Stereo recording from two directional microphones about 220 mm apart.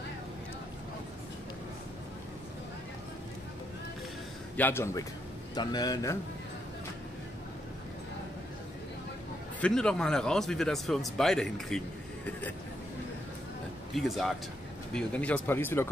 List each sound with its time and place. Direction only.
4.6 s speech: 10° left (ahead or behind)
9.6 s speech: 5° left (ahead or behind)
13.9 s speech: centre (ahead or behind)